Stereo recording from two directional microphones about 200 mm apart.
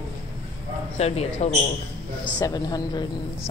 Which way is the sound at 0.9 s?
30° left (ahead or behind).